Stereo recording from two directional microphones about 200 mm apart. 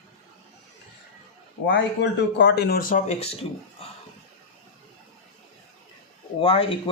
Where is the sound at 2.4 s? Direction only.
55° left (ahead or behind); by 3.3 s 35° left (ahead or behind).